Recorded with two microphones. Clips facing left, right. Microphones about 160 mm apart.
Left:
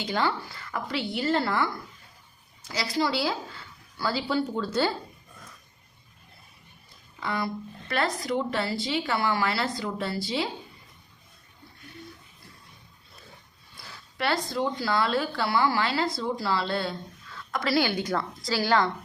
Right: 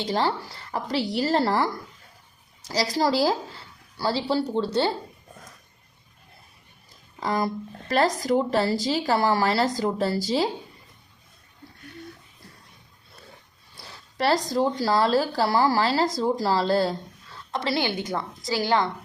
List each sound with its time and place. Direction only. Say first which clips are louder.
0.0 s speech: right 3 dB; 35° right (ahead or behind)
7.2 s speech: right 5 dB; 40° right (ahead or behind)
13.7 s a woman's voice: right 5 dB; 35° right (ahead or behind); by 18.9 s 20° right (ahead or behind)